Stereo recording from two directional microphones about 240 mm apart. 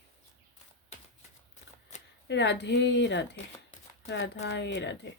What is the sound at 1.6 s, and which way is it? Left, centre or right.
Shuffling cards, left.